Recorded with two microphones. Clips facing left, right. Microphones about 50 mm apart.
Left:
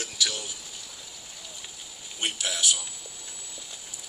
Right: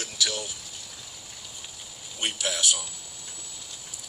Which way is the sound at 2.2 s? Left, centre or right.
Centre.